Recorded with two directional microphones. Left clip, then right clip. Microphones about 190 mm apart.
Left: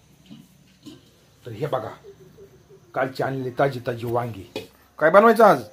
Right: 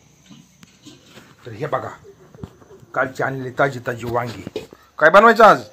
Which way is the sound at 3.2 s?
25° right (ahead or behind).